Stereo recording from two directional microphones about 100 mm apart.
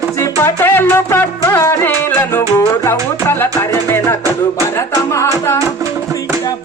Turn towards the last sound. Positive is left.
turn(degrees=30)  # may be behind; listen again after turning